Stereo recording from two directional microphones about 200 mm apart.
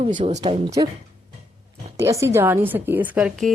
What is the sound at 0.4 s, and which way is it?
Speech, 20° right (ahead or behind).